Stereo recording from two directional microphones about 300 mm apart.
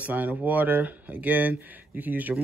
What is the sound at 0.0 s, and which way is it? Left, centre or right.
Speech, centre.